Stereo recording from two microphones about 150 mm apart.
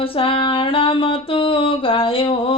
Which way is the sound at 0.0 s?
35° left (ahead or behind).